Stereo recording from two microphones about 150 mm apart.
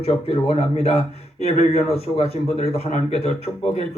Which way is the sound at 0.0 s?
40° left (ahead or behind).